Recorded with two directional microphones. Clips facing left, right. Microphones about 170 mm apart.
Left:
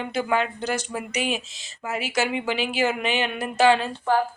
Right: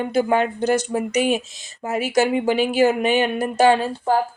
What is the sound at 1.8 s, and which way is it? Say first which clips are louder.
A woman's voice: right 6 dB; 40° right (ahead or behind).